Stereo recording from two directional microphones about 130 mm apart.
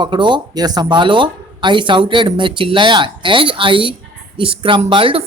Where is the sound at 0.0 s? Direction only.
35° right (ahead or behind).